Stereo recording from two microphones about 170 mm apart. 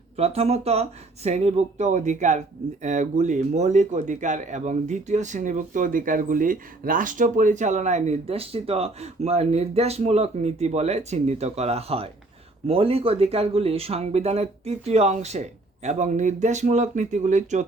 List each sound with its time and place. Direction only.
0.2 s speech: 35° right (ahead or behind)